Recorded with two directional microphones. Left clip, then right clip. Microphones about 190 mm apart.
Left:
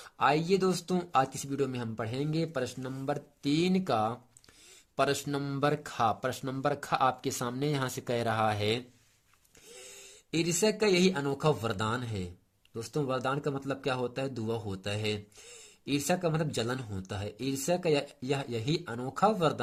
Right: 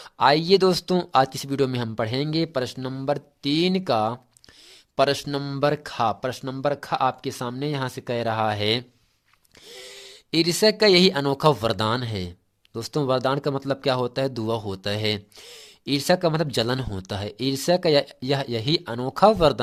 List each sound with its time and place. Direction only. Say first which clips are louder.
0.0 s speech: right 8 dB; 30° right (ahead or behind)
9.7 s speech: right 9 dB; 40° right (ahead or behind)